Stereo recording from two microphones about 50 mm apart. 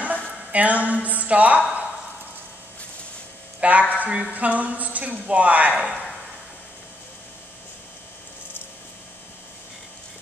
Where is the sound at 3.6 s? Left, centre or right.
Right.